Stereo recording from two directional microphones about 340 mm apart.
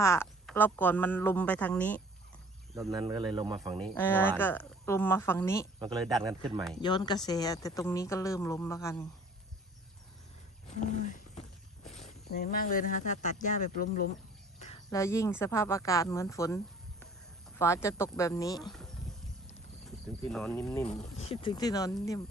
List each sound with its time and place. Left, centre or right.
0.0 s speech: centre
2.7 s speech: centre
3.8 s speech: centre
6.8 s speech: centre
10.8 s a sound: left
11.9 s a sound: centre
12.3 s speech: left; by 16.6 s centre
17.6 s speech: centre
20.2 s speech: centre
21.2 s speech: centre